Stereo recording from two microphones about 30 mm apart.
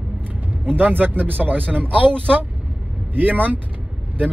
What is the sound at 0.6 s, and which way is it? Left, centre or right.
Speech, right.